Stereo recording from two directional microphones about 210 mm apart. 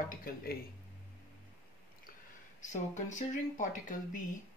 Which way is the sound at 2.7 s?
35° left (ahead or behind).